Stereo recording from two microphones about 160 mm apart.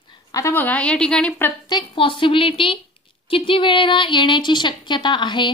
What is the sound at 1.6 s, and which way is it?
A woman's voice, 30° left (ahead or behind).